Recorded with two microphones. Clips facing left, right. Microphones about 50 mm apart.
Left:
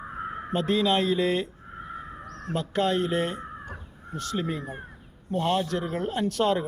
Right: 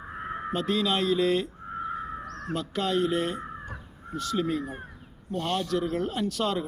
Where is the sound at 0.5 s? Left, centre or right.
Centre.